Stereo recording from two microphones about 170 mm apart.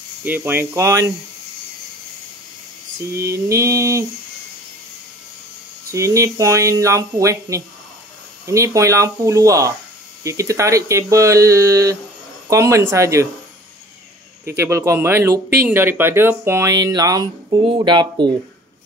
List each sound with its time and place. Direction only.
0.2 s speech: 10° right (ahead or behind)
3.2 s speech: 15° right (ahead or behind)
5.9 s speech: 20° right (ahead or behind)
14.5 s speech: 15° right (ahead or behind)